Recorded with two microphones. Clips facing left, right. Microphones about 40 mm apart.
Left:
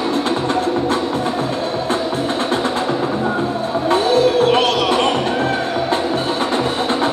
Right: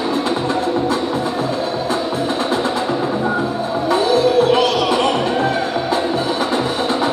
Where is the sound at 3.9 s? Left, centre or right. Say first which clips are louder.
Even; left.